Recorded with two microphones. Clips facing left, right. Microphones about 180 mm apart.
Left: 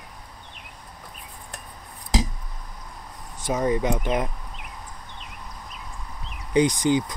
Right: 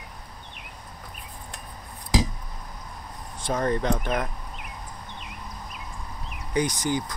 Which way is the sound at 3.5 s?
10° left (ahead or behind).